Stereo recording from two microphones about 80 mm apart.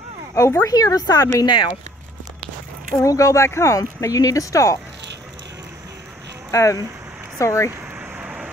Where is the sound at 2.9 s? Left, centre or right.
Left.